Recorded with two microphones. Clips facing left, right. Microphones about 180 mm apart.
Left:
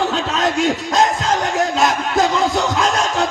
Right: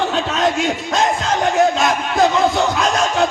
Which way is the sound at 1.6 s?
40° left (ahead or behind).